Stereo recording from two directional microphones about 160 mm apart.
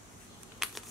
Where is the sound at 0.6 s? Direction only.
Centre (ahead or behind).